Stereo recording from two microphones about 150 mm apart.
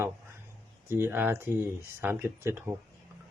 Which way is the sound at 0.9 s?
15° right (ahead or behind).